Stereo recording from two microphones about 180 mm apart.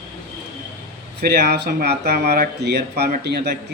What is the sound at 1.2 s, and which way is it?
A man's voice, 65° right (ahead or behind).